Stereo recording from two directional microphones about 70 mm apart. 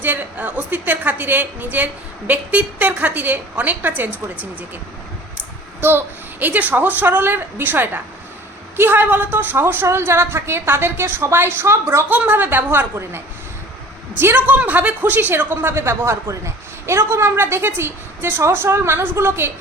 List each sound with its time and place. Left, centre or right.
0.0 s a woman's voice: right
6.4 s a woman's voice: right
12.0 s a woman's voice: right